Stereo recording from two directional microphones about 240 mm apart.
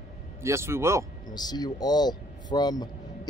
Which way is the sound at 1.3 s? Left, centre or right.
Centre.